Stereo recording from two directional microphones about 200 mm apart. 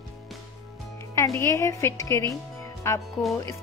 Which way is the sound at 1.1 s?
15° left (ahead or behind).